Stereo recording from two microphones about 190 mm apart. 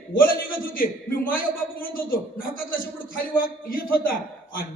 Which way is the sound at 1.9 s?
50° left (ahead or behind).